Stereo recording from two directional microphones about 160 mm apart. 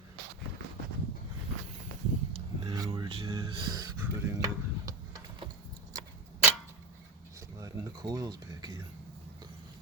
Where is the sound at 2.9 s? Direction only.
35° right (ahead or behind).